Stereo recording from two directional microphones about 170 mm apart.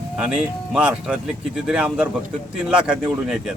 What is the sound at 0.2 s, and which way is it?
Speech, 5° right (ahead or behind).